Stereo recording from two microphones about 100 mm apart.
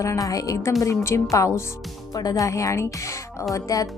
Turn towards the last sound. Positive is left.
turn(degrees=35)  # may be behind; listen again after turning